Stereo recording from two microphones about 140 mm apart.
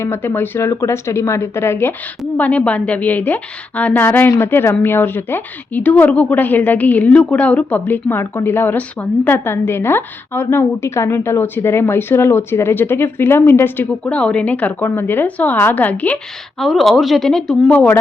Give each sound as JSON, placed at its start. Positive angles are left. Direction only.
{"t": 0.0, "sound": "a woman's voice", "side_deg": 20}
{"t": 16.6, "sound": "speech", "side_deg": 0}